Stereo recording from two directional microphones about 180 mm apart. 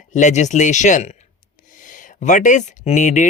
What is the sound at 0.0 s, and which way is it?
Speech, 40° left (ahead or behind).